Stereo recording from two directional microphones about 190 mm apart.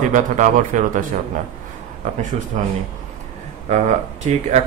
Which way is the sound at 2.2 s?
40° right (ahead or behind).